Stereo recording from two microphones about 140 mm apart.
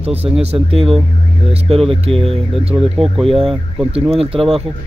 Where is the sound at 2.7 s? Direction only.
30° right (ahead or behind).